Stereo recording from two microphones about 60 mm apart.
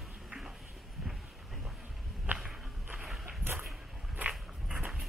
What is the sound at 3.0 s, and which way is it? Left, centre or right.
Walk, centre.